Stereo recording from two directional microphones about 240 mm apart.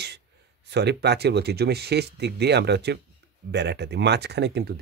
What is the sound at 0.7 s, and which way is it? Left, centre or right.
Speech, right.